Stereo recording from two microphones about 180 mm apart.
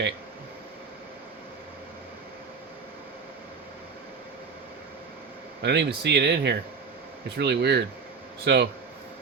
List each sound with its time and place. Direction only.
5.6 s speech: 70° right (ahead or behind)